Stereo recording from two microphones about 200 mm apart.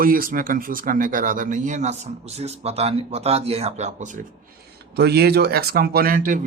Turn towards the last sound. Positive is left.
turn(degrees=-45)  # may be behind; listen again after turning